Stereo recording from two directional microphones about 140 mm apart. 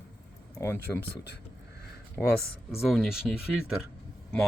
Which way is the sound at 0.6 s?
15° left (ahead or behind).